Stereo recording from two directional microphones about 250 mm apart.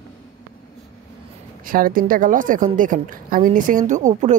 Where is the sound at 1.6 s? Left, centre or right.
Right.